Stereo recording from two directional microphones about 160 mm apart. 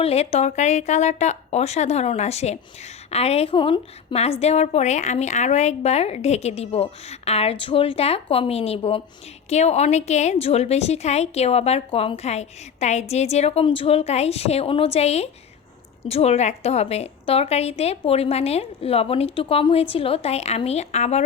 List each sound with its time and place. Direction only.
0.0 s speech: 40° left (ahead or behind)